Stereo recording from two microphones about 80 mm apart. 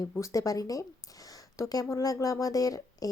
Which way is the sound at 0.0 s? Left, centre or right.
Left.